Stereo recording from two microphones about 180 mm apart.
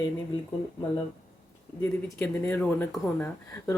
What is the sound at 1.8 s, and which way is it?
Speech, 15° left (ahead or behind).